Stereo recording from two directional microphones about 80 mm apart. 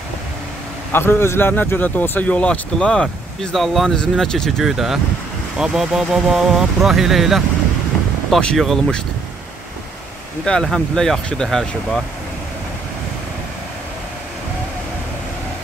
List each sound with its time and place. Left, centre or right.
0.9 s speech: left; by 7.4 s centre
8.5 s speech: centre
10.4 s speech: centre